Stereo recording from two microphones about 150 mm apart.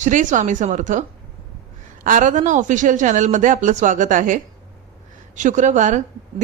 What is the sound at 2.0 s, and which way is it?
A woman's voice, 60° right (ahead or behind).